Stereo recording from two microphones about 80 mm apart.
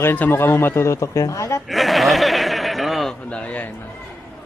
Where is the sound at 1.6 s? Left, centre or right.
Centre.